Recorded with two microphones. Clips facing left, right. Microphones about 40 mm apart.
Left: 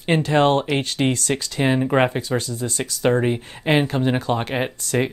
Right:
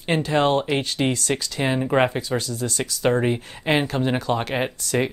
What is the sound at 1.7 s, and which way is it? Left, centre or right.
Speech, centre.